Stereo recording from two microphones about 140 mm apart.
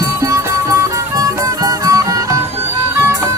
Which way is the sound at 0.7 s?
20° right (ahead or behind).